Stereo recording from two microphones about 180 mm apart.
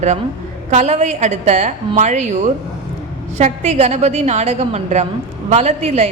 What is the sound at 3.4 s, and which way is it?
A woman's voice, 35° right (ahead or behind).